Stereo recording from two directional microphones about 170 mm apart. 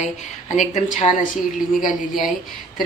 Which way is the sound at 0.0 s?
45° left (ahead or behind).